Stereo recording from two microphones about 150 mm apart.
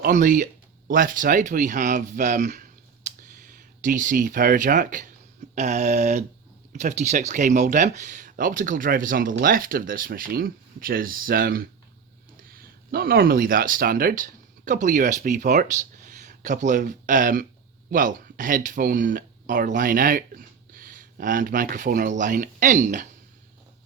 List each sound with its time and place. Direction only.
0.0 s speech: 65° right (ahead or behind)
5.5 s a sound: 50° right (ahead or behind)
6.7 s speech: 50° right (ahead or behind)